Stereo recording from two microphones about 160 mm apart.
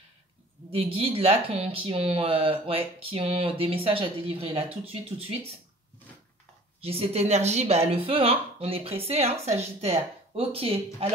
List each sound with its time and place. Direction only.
0.7 s speech: 35° right (ahead or behind)
6.8 s speech: 40° right (ahead or behind)